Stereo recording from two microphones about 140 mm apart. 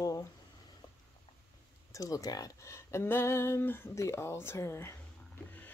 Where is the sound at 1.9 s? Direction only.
25° left (ahead or behind).